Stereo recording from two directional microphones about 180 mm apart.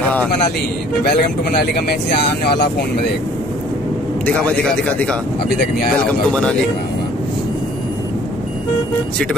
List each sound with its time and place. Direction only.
1.0 s speech: 60° left (ahead or behind)